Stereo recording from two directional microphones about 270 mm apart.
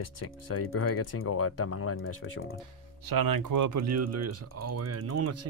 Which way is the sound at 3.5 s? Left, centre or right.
Right.